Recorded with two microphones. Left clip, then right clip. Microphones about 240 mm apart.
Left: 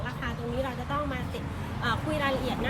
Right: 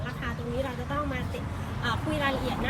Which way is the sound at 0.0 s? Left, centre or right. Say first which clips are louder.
Left 1 dB; centre.